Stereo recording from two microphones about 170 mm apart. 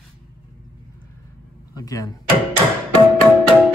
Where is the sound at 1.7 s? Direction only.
20° left (ahead or behind).